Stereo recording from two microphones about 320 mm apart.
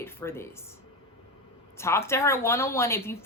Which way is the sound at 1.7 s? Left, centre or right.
Centre.